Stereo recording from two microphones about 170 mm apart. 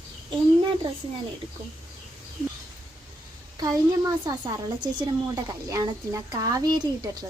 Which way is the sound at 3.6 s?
20° right (ahead or behind).